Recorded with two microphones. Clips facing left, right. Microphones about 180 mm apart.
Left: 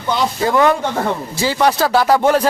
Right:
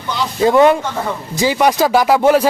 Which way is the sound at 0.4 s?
20° right (ahead or behind).